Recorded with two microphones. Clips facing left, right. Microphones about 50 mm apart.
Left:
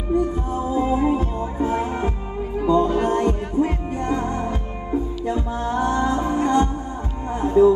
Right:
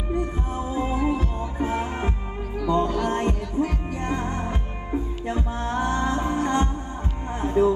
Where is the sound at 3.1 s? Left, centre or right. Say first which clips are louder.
Left 4 dB; right.